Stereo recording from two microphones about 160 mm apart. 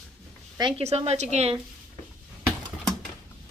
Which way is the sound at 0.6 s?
35° right (ahead or behind).